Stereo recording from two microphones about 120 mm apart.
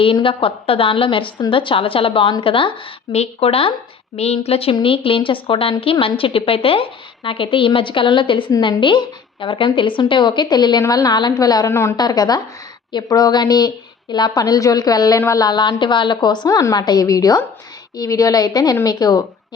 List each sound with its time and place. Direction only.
0.0 s a woman's voice: 45° left (ahead or behind)